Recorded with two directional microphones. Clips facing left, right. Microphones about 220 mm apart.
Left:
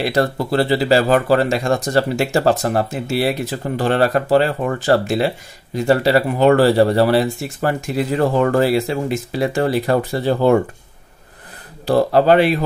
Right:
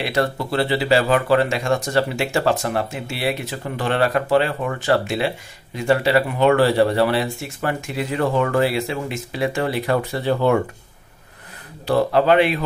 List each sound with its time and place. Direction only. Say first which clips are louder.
0.0 s speech: left 4 dB; 40° left (ahead or behind)
11.8 s speech: left 3 dB; 35° left (ahead or behind)